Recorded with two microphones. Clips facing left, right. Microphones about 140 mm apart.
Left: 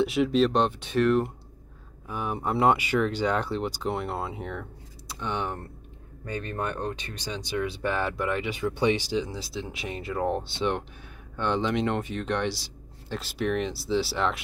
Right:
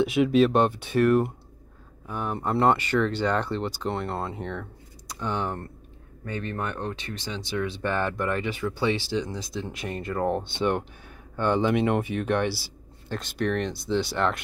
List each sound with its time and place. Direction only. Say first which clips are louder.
0.0 s speech: right 2 dB; centre (ahead or behind)
2.0 s speech: right 1 dB; 10° left (ahead or behind)
6.5 s speech: left 3 dB; 15° left (ahead or behind)
9.2 s speech: right 2 dB; 5° left (ahead or behind)